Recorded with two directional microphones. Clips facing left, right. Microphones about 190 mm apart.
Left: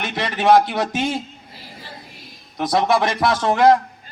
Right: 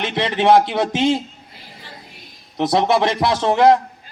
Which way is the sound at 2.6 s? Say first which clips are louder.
Right 2 dB; 25° right (ahead or behind).